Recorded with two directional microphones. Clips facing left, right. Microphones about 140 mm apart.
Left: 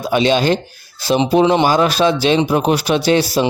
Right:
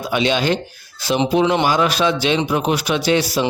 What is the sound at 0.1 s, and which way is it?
Speech, 35° left (ahead or behind).